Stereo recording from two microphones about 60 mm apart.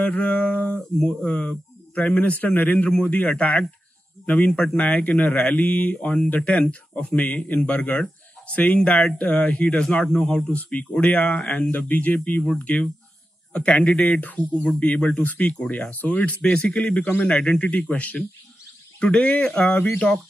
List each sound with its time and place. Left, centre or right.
0.0 s speech: left
4.5 s speech: centre
4.7 s speech: left
10.6 s speech: left
15.5 s speech: centre
15.9 s speech: left